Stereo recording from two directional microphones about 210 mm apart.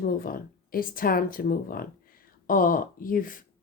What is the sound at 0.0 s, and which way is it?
Speech, 45° left (ahead or behind).